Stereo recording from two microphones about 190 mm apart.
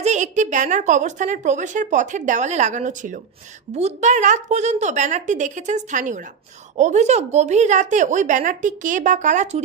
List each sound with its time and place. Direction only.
0.0 s speech: 40° right (ahead or behind)